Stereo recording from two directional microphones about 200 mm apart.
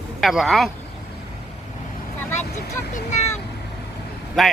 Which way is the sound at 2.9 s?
35° left (ahead or behind).